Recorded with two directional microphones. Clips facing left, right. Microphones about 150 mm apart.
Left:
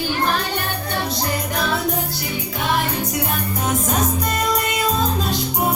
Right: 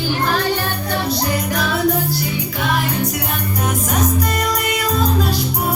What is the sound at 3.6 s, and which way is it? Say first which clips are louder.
Music: right 1 dB; 25° left (ahead or behind).